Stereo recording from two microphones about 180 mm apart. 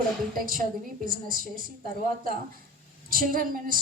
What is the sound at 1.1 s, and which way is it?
A woman's voice, 55° right (ahead or behind).